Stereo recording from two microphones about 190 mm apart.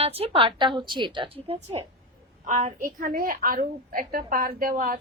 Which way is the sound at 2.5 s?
40° right (ahead or behind).